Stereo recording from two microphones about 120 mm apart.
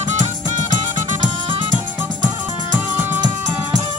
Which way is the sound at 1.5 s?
45° right (ahead or behind).